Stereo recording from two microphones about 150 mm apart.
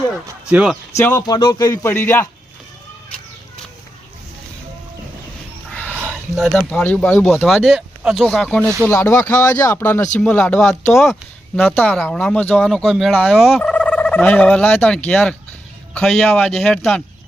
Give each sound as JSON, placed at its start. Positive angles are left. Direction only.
{"t": 0.3, "sound": "speech", "side_deg": -10}
{"t": 0.9, "sound": "speech", "side_deg": 20}
{"t": 6.4, "sound": "speech", "side_deg": 5}